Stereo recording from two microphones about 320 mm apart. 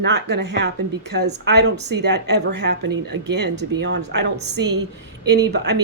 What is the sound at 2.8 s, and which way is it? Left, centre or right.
Speech, right.